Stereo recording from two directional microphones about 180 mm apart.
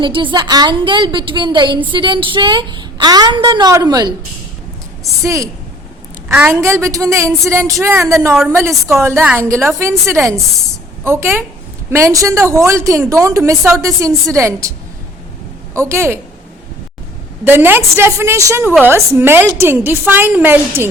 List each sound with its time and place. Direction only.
0.0 s a woman's voice: 25° right (ahead or behind)
5.2 s a woman's voice: 15° right (ahead or behind)
15.7 s a woman's voice: 15° right (ahead or behind)
17.4 s a woman's voice: 10° right (ahead or behind)